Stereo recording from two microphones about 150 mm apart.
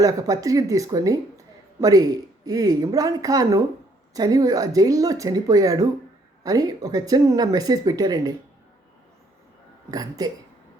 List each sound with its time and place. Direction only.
0.0 s speech: 25° right (ahead or behind)
9.9 s speech: 25° right (ahead or behind)